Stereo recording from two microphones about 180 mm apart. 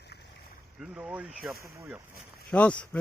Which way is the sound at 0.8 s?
5° right (ahead or behind).